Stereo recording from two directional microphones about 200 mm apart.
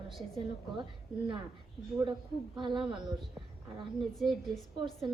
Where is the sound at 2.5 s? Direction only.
25° right (ahead or behind).